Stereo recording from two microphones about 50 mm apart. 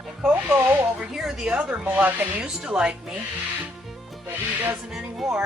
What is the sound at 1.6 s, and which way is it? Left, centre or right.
Speech, right.